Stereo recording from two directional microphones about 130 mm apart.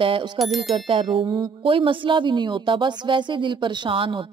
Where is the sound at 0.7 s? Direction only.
45° right (ahead or behind).